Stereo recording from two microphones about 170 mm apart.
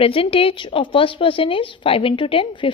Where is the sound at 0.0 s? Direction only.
35° left (ahead or behind).